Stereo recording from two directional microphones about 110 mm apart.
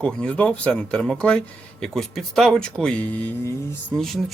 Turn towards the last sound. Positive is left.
turn(degrees=5)  # may be behind; listen again after turning